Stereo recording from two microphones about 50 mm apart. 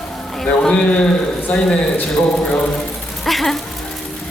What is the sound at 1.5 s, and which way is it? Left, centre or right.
Speech, left.